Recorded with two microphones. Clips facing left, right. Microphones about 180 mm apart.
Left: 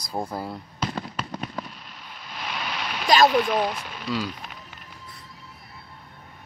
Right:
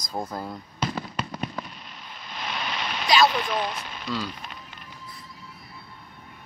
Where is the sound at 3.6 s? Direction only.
10° left (ahead or behind).